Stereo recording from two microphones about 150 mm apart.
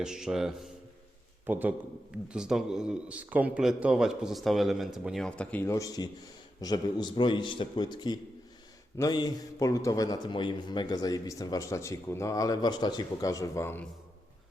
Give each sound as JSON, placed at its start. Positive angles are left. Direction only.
{"t": 0.0, "sound": "a man's voice", "side_deg": -5}